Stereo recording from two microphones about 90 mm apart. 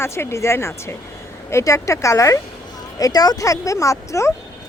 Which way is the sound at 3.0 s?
45° left (ahead or behind).